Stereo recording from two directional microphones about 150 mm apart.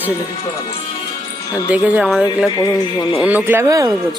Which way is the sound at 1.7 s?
5° right (ahead or behind).